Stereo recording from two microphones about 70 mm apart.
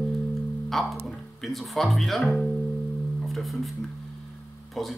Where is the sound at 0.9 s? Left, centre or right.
Centre.